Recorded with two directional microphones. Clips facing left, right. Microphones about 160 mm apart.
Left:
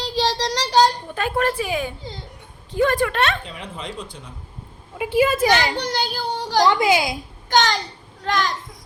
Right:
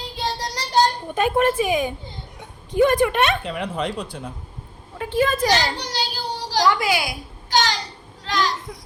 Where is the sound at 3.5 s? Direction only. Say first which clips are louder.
Right 7 dB; 65° right (ahead or behind).